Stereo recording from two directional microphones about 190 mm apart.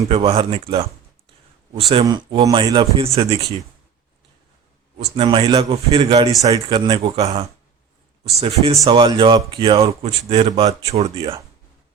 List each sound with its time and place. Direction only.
0.1 s speech: 30° right (ahead or behind)
4.9 s speech: 30° right (ahead or behind)